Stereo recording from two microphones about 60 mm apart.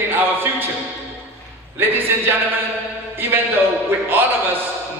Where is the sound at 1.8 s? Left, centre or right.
Right.